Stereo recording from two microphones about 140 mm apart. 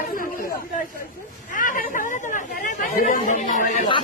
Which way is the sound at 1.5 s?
70° left (ahead or behind).